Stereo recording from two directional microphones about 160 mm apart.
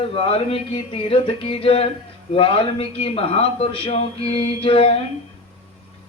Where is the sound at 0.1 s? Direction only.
35° left (ahead or behind).